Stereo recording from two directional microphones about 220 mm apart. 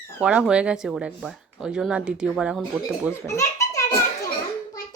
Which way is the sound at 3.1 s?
15° left (ahead or behind).